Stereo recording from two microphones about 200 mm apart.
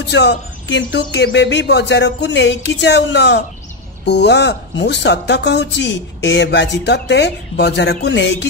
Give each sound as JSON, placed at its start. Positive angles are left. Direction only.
{"t": 0.0, "sound": "a woman's voice", "side_deg": 60}